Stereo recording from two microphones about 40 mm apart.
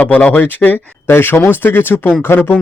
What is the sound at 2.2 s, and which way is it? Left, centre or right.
Speech, left.